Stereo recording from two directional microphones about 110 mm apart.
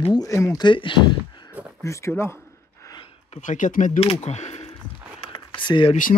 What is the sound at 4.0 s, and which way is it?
Speech, 75° left (ahead or behind).